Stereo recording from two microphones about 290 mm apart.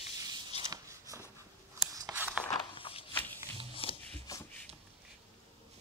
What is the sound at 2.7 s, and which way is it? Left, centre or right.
Walk, centre.